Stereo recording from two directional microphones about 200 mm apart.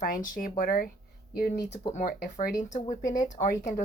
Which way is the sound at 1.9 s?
45° left (ahead or behind).